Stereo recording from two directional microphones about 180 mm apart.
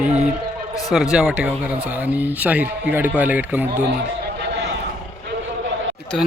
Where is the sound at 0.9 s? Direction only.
5° right (ahead or behind).